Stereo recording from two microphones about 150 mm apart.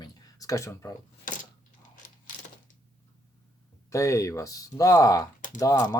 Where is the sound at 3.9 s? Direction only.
20° left (ahead or behind).